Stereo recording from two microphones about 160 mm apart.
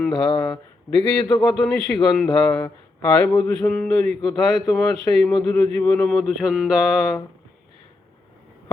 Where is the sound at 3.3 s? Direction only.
5° left (ahead or behind).